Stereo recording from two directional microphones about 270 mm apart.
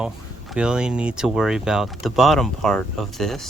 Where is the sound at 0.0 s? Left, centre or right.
Centre.